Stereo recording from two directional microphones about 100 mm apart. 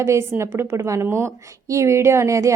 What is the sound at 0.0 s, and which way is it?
Speech, 30° right (ahead or behind).